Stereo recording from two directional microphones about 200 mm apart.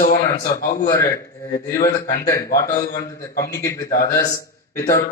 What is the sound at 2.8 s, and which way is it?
Speech, 45° left (ahead or behind).